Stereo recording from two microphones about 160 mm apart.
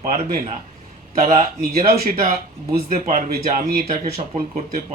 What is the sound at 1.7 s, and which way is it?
Speech, 70° right (ahead or behind).